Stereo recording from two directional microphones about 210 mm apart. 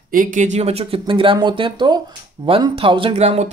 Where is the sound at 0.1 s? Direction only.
40° right (ahead or behind).